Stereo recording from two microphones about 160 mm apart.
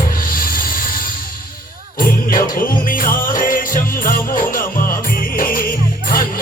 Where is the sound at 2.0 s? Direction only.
60° left (ahead or behind).